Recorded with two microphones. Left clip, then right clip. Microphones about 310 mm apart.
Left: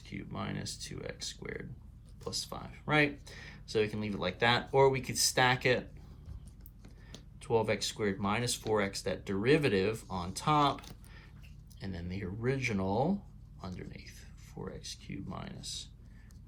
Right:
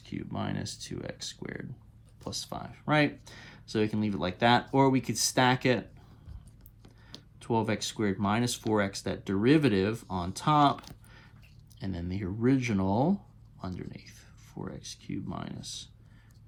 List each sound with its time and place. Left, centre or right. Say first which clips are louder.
0.0 s speech: right 4 dB; right
7.3 s speech: even; right